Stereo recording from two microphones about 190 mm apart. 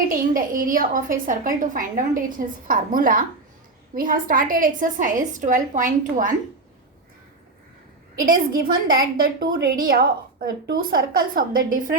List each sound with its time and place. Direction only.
0.1 s a woman's voice: 45° right (ahead or behind)
8.2 s a woman's voice: 50° right (ahead or behind)